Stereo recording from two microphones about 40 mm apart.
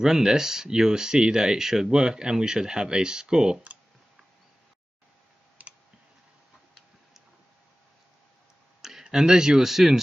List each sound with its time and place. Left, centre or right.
0.0 s speech: centre
5.6 s clicking: right
9.0 s speech: centre